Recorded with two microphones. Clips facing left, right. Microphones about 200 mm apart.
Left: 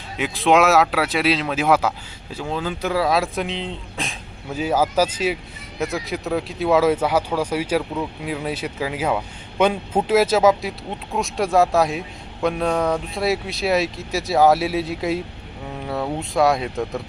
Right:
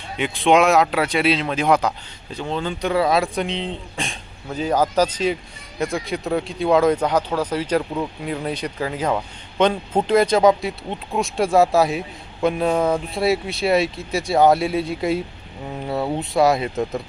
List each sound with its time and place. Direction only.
0.2 s speech: centre (ahead or behind)